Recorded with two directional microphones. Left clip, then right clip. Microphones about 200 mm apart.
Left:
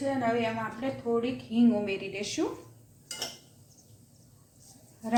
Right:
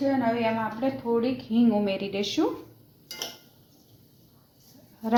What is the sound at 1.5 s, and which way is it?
Speech, 35° right (ahead or behind).